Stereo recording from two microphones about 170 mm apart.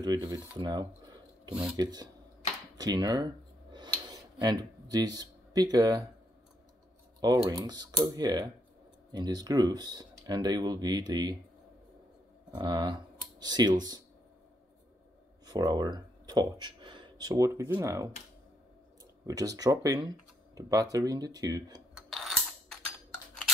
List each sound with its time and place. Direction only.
0.0 s speech: 25° right (ahead or behind)
1.5 s speech: 5° right (ahead or behind)
1.8 s speech: 25° right (ahead or behind)
3.7 s a sound: 25° right (ahead or behind)
7.2 s speech: 25° right (ahead or behind)
12.4 s speech: 25° right (ahead or behind)
15.4 s speech: 25° right (ahead or behind)
19.2 s speech: 20° right (ahead or behind)
21.9 s music: centre (ahead or behind)